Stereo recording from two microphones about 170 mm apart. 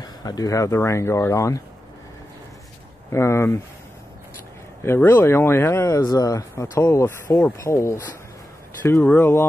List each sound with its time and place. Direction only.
0.0 s speech: 20° left (ahead or behind)
3.1 s speech: 15° left (ahead or behind)
4.8 s speech: 10° left (ahead or behind)